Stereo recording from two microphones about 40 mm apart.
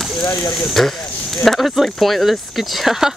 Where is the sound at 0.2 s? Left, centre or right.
Left.